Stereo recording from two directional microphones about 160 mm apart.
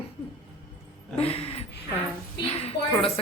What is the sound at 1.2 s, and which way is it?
A woman's voice, 40° left (ahead or behind).